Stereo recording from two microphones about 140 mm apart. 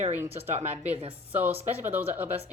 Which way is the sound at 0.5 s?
50° right (ahead or behind).